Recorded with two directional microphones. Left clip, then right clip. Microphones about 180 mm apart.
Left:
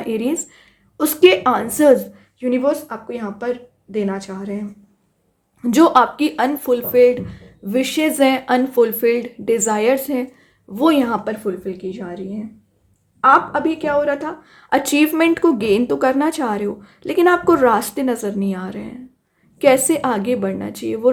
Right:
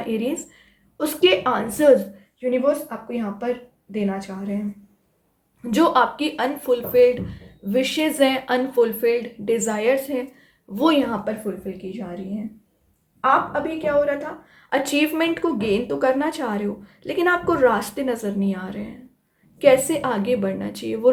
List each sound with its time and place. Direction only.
0.0 s speech: 35° left (ahead or behind)
2.4 s a woman's voice: 50° left (ahead or behind)
5.6 s a woman's voice: 35° left (ahead or behind)
10.8 s speech: 25° left (ahead or behind)
11.0 s a woman's voice: 40° left (ahead or behind)
13.2 s a woman's voice: 50° left (ahead or behind); by 21.1 s 25° left (ahead or behind)